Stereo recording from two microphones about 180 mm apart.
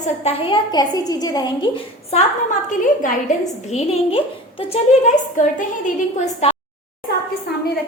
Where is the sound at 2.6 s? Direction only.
45° left (ahead or behind).